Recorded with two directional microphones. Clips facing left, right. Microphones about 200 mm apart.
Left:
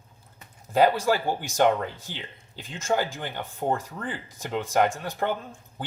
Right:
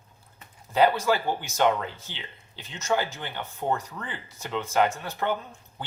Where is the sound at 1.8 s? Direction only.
15° left (ahead or behind).